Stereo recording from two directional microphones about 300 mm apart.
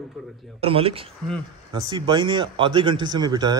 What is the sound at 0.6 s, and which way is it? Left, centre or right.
A man's voice, centre.